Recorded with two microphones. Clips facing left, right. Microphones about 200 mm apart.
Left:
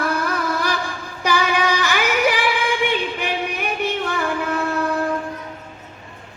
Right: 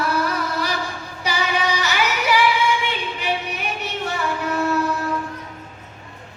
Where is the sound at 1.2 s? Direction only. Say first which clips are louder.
Left 3 dB; 50° left (ahead or behind).